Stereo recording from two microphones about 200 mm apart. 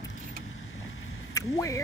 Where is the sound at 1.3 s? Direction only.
15° left (ahead or behind).